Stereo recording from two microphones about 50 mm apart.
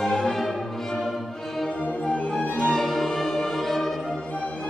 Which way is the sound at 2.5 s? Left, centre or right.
Centre.